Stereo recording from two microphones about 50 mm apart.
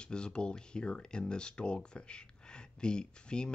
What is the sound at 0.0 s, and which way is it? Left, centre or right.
Speech, centre.